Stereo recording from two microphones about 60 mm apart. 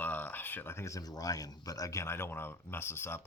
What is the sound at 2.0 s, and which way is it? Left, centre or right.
Speech, left.